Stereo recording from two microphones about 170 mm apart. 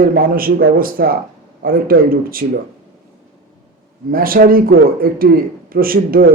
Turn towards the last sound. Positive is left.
turn(degrees=-60)  # may be behind; listen again after turning